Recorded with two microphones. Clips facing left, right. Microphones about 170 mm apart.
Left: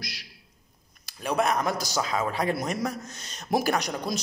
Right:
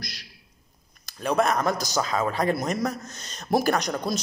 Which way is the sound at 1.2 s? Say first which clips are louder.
Right 2 dB; 10° left (ahead or behind).